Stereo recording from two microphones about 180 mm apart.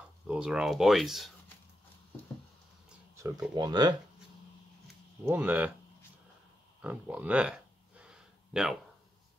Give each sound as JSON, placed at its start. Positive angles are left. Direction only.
{"t": 0.3, "sound": "speech", "side_deg": -5}
{"t": 3.2, "sound": "speech", "side_deg": -20}
{"t": 5.2, "sound": "speech", "side_deg": -10}
{"t": 6.8, "sound": "a sound", "side_deg": -5}